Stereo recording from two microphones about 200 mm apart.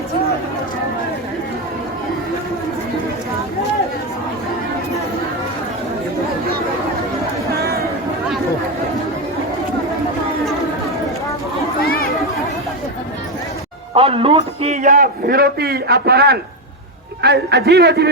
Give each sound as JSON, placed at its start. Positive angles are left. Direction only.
{"t": 7.6, "sound": "chatter", "side_deg": -50}
{"t": 11.9, "sound": "a sound", "side_deg": 50}
{"t": 13.9, "sound": "a man's voice", "side_deg": -30}